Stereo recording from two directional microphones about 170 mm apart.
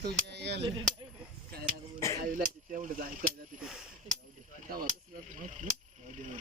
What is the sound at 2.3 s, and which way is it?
Mechanisms, 50° right (ahead or behind).